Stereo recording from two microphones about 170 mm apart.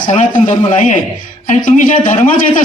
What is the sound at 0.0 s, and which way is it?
A man's voice, 50° left (ahead or behind).